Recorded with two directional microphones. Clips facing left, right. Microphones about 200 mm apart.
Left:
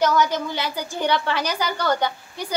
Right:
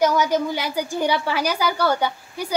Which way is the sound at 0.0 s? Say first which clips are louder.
Right 2 dB; 10° right (ahead or behind).